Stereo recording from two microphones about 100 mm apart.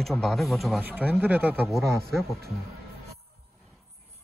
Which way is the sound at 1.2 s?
20° right (ahead or behind).